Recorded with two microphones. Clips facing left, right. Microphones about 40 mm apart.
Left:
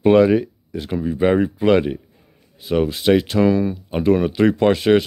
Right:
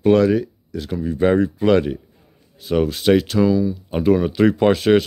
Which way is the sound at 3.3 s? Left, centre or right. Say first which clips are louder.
Even; left.